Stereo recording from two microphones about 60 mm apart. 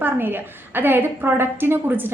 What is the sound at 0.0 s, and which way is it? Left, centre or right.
A woman's voice, right.